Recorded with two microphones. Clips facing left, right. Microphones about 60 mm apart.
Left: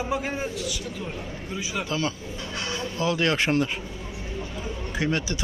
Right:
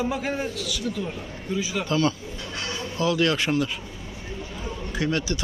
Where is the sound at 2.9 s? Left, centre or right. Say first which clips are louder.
Right 2 dB; left.